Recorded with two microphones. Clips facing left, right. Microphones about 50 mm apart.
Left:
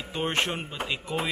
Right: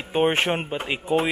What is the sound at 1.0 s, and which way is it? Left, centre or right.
Speech, centre.